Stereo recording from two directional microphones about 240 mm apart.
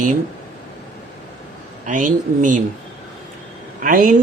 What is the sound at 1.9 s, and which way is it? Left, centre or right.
Speech, right.